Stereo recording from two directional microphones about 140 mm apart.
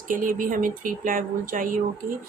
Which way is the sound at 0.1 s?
75° right (ahead or behind).